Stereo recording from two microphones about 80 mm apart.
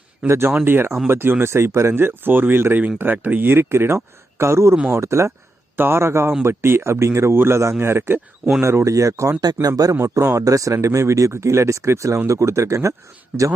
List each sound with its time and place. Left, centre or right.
0.3 s speech: right
8.8 s speech: right
9.9 s speech: right
13.3 s speech: right